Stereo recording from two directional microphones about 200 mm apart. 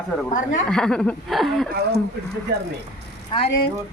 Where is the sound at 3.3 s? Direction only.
25° left (ahead or behind).